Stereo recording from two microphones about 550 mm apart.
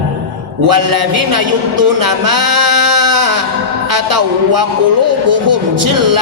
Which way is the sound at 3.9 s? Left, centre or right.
Right.